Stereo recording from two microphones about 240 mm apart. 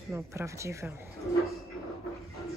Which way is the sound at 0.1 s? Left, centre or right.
Centre.